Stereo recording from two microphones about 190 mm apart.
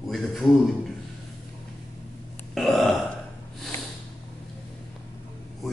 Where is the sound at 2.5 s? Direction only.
Centre (ahead or behind).